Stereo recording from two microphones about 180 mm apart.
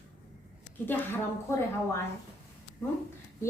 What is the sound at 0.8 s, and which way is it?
A woman's voice, 10° left (ahead or behind).